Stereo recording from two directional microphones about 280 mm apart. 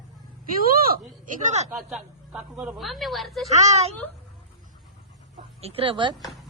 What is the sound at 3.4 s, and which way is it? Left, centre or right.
Speech, right.